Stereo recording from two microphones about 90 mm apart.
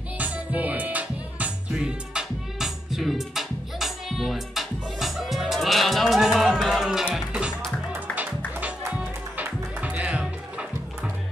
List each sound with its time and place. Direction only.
0.2 s music: 15° right (ahead or behind)
9.4 s music: 15° right (ahead or behind)